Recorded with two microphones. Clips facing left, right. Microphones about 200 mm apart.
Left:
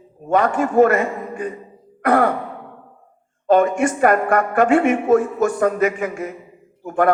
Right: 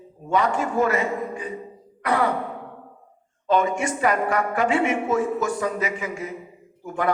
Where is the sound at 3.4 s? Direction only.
55° left (ahead or behind).